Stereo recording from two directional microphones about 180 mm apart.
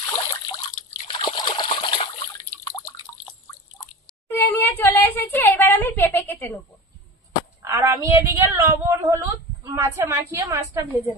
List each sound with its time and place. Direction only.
0.1 s water: 20° left (ahead or behind)
4.3 s a sound: 10° left (ahead or behind)
7.6 s a woman's voice: 15° right (ahead or behind)